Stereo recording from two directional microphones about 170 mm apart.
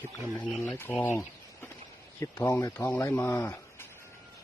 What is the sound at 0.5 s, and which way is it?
Speech, 15° left (ahead or behind).